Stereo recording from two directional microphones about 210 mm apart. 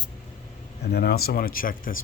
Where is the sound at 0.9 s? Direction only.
50° left (ahead or behind).